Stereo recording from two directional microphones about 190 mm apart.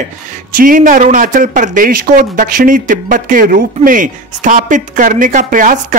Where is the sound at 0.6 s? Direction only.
45° right (ahead or behind).